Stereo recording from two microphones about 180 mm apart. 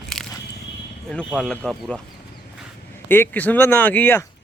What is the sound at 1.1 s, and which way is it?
Speech, 5° left (ahead or behind).